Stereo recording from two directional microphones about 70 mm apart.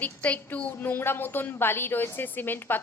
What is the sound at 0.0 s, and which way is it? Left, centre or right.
A woman's voice, left.